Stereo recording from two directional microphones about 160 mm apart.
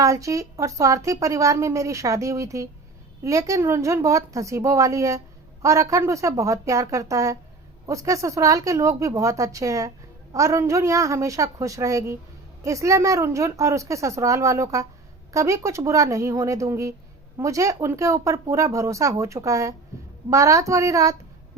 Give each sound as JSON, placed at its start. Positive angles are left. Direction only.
{"t": 0.0, "sound": "a woman's voice", "side_deg": -20}